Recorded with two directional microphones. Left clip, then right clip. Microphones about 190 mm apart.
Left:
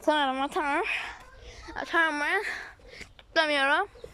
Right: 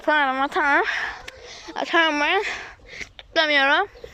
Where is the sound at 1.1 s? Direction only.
Centre (ahead or behind).